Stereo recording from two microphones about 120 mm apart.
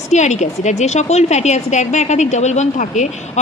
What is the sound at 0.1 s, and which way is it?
A woman's voice, 75° left (ahead or behind).